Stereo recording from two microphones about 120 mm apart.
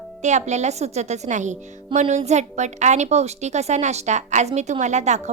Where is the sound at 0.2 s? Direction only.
75° right (ahead or behind).